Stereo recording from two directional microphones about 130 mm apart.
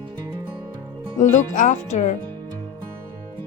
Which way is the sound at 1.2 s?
70° left (ahead or behind).